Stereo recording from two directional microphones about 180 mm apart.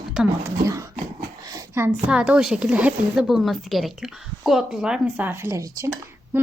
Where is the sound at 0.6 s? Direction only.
20° right (ahead or behind).